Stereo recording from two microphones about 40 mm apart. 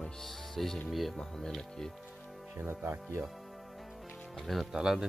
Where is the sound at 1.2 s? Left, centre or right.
Centre.